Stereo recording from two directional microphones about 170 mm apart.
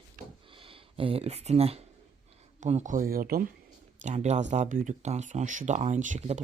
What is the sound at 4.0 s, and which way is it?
Speech, 45° right (ahead or behind).